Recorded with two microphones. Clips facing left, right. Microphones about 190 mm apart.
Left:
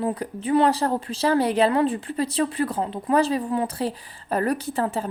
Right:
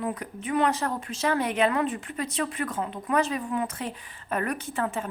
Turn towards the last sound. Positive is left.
turn(degrees=35)  # may be behind; listen again after turning